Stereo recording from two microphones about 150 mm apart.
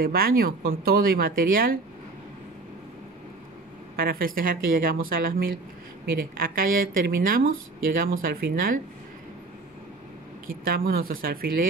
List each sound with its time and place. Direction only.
0.0 s speech: 80° right
3.9 s speech: 75° right (ahead or behind)
10.6 s speech: 75° right (ahead or behind)